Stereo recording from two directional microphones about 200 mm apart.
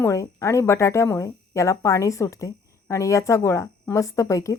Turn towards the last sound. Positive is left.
turn(degrees=15)  # may be behind; listen again after turning